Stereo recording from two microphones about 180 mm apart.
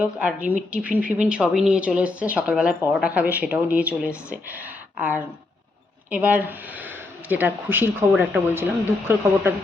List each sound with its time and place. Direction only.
0.0 s speech: 10° right (ahead or behind)